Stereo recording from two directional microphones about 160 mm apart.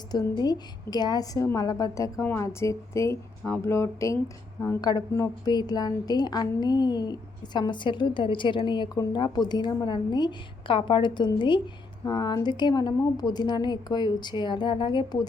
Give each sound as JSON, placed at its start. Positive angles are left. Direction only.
{"t": 0.1, "sound": "a woman's voice", "side_deg": 25}